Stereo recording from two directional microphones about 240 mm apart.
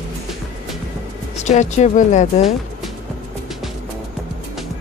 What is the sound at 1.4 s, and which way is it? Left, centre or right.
Speech, left.